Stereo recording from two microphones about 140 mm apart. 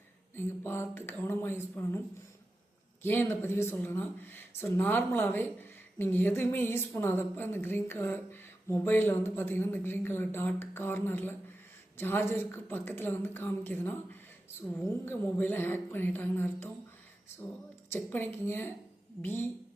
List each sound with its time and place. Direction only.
0.3 s speech: 15° left (ahead or behind)
3.0 s speech: 15° left (ahead or behind)
17.9 s speech: 15° left (ahead or behind)